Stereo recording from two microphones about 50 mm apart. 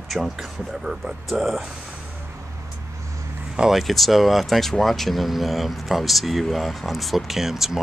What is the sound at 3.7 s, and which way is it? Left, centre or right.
Speech, centre.